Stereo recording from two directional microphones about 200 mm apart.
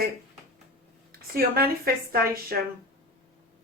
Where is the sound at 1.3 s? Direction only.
50° right (ahead or behind).